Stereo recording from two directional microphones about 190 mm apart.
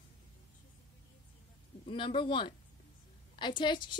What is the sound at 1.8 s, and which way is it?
A woman's voice, 25° left (ahead or behind).